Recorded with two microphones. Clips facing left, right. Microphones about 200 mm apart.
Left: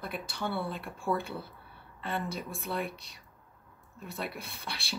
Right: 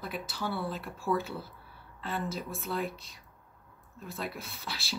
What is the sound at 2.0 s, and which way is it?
Speech, centre (ahead or behind).